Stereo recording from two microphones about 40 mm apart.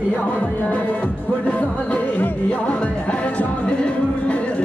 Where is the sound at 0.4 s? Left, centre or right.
Left.